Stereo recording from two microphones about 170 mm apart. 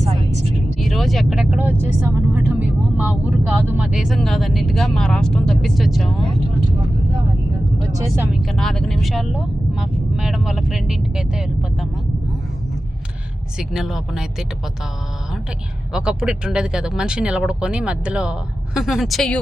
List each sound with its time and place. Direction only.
0.0 s vehicle: 40° right (ahead or behind)
0.8 s speech: centre (ahead or behind)
7.9 s speech: 15° right (ahead or behind)
8.4 s speech: centre (ahead or behind)
13.6 s speech: centre (ahead or behind)
15.9 s speech: 5° right (ahead or behind)